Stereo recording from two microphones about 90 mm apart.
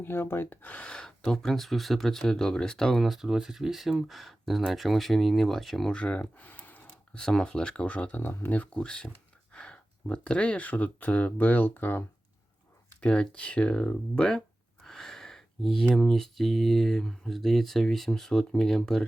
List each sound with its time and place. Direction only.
0.0 s speech: 25° left (ahead or behind); by 6.0 s 5° left (ahead or behind)
6.0 s speech: 15° left (ahead or behind)
13.0 s speech: 10° left (ahead or behind)